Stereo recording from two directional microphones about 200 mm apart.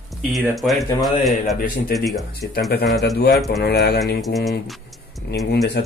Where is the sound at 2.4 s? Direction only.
55° left (ahead or behind).